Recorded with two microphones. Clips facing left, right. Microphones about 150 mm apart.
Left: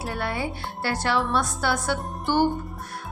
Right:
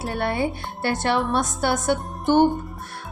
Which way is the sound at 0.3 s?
25° right (ahead or behind).